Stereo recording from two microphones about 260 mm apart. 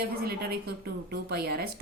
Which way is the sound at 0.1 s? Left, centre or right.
Right.